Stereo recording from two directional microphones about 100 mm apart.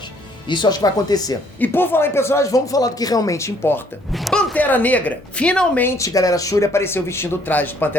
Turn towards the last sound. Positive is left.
turn(degrees=20)  # may be behind; listen again after turning